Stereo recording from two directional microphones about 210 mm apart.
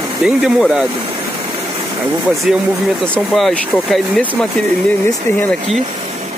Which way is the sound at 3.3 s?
Centre (ahead or behind).